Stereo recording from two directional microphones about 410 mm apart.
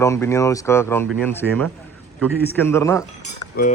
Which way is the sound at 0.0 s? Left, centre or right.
Centre.